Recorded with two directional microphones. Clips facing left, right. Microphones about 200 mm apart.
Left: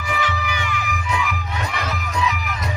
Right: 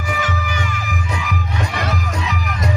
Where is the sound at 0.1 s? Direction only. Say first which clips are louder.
Right 1 dB; 45° right (ahead or behind).